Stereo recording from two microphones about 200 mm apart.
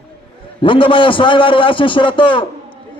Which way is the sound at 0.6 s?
25° left (ahead or behind).